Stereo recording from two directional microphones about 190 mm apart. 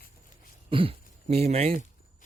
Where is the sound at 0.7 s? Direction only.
30° right (ahead or behind).